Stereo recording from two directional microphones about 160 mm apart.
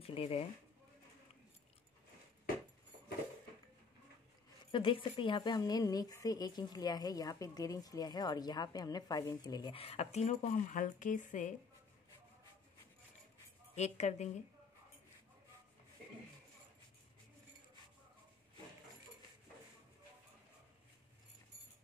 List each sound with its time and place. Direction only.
0.0 s speech: 35° left (ahead or behind)
4.6 s a woman's voice: 30° left (ahead or behind); by 11.5 s 50° left (ahead or behind)
13.7 s a woman's voice: 45° left (ahead or behind)